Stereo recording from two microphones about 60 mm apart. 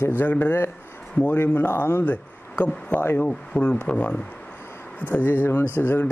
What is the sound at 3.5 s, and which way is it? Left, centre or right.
Speech, centre.